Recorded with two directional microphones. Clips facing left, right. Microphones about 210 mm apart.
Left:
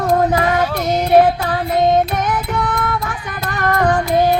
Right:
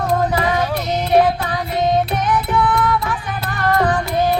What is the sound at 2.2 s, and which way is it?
Music, 45° left (ahead or behind).